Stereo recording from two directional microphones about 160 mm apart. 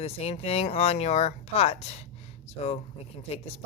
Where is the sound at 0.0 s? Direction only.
40° left (ahead or behind).